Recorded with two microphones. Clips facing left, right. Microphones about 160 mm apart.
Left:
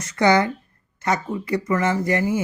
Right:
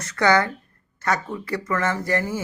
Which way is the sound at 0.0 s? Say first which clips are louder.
Left 2 dB; 15° left (ahead or behind).